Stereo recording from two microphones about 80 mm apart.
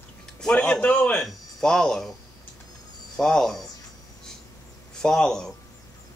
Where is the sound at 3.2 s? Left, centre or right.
Centre.